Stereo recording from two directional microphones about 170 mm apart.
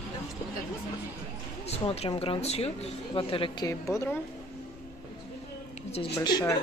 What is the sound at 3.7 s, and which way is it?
Speech, 20° left (ahead or behind).